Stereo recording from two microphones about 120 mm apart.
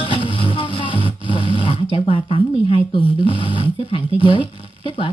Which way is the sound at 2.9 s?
45° left (ahead or behind).